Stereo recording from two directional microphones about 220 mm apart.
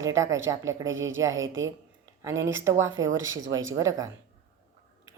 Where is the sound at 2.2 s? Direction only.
15° right (ahead or behind).